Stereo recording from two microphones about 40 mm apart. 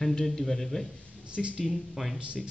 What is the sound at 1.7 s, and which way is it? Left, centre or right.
Speech, centre.